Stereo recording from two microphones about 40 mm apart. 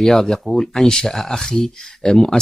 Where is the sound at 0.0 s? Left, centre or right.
Centre.